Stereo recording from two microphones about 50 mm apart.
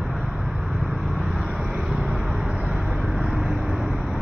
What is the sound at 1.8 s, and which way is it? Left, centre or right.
Vehicle, centre.